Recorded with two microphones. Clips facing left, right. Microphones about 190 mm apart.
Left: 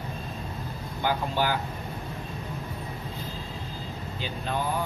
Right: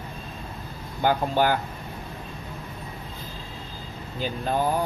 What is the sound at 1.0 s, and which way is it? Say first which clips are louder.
Speech: right 5 dB; 50° right (ahead or behind).